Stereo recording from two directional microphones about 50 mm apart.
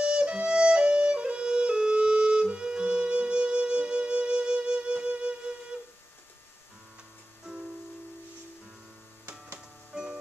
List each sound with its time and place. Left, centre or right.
0.0 s music: right
9.9 s music: centre